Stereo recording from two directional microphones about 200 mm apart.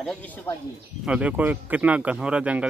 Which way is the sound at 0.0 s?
5° left (ahead or behind).